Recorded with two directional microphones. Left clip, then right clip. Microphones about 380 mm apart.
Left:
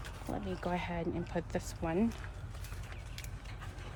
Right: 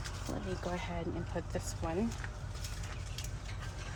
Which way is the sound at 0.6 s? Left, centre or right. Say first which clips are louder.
Left 4 dB; left.